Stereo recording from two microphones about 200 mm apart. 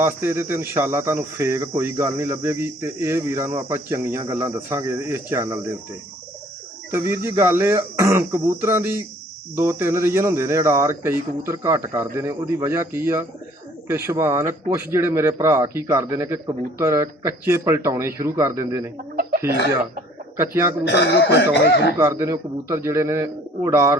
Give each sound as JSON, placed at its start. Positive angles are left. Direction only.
{"t": 0.0, "sound": "speech", "side_deg": -10}
{"t": 6.9, "sound": "speech", "side_deg": -15}
{"t": 20.3, "sound": "speech", "side_deg": -10}
{"t": 20.8, "sound": "speech", "side_deg": 55}
{"t": 21.9, "sound": "speech", "side_deg": -15}